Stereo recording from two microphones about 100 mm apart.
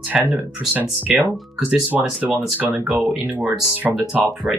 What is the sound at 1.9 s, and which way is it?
Speech, 5° right (ahead or behind).